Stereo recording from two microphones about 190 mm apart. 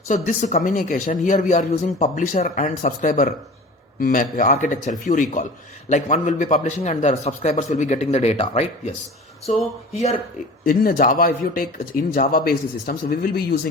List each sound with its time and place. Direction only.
0.1 s a man's voice: 40° left (ahead or behind)
10.7 s speech: 50° left (ahead or behind)